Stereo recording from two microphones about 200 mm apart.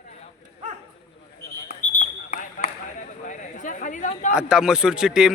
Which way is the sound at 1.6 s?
40° left (ahead or behind).